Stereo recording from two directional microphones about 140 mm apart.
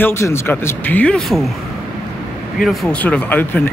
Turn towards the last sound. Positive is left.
turn(degrees=10)  # may be behind; listen again after turning